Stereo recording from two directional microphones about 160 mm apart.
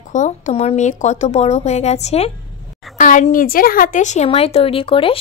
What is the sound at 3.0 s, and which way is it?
Speech, 55° left (ahead or behind).